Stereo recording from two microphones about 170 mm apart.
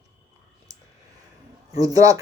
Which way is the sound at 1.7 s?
20° right (ahead or behind).